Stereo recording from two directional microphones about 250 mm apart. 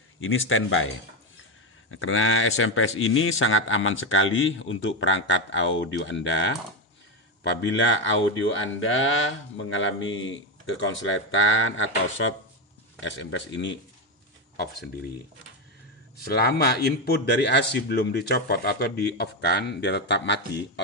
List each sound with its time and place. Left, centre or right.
0.2 s speech: left
16.2 s speech: left